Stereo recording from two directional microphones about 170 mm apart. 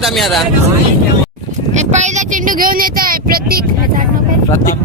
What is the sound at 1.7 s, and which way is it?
Speech, 45° right (ahead or behind).